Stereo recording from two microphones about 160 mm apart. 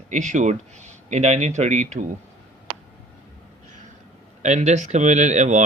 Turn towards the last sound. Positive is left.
turn(degrees=-45)  # may be behind; listen again after turning